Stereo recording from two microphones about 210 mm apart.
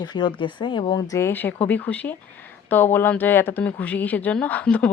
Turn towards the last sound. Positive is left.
turn(degrees=5)  # may be behind; listen again after turning